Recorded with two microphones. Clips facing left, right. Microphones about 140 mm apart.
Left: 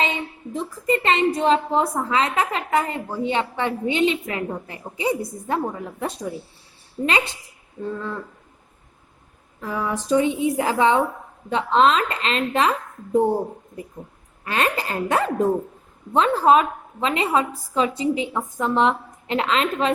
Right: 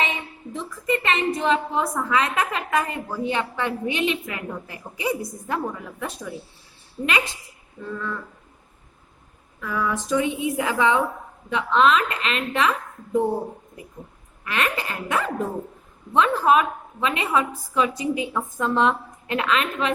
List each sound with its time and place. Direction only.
0.0 s a woman's voice: 35° left (ahead or behind)
7.8 s a woman's voice: 30° left (ahead or behind)
9.6 s a woman's voice: 30° left (ahead or behind)